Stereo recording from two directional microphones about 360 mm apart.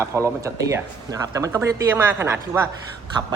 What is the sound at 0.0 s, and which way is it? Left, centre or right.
Speech, centre.